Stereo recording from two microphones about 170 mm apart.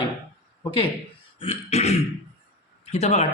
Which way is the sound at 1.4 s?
35° left (ahead or behind).